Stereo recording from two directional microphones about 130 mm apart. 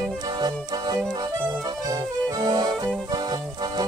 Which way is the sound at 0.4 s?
30° right (ahead or behind).